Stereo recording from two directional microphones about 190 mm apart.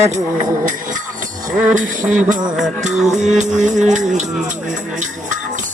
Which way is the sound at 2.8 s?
40° right (ahead or behind).